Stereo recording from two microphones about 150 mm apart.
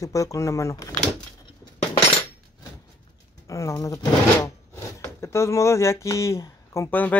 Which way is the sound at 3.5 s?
20° left (ahead or behind).